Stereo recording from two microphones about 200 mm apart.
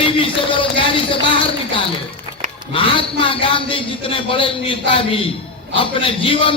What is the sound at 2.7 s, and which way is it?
A man's voice, 25° left (ahead or behind).